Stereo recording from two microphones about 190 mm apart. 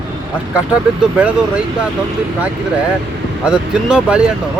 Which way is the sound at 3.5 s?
5° right (ahead or behind).